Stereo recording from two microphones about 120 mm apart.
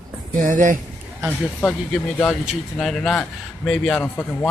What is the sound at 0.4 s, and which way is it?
Speech, 90° right.